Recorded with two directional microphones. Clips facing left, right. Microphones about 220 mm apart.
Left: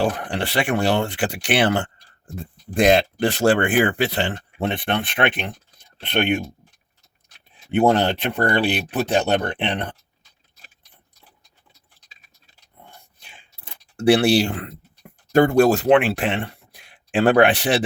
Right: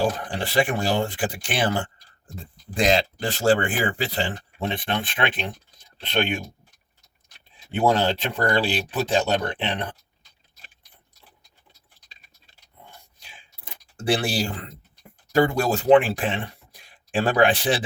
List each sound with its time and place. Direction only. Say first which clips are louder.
0.0 s speech: left 2 dB; 70° left (ahead or behind)
2.7 s speech: left 5 dB; 60° left (ahead or behind)
7.7 s speech: left 4 dB; 60° left (ahead or behind)
13.9 s speech: left 8 dB; 70° left (ahead or behind)
15.3 s speech: left 6 dB; 60° left (ahead or behind)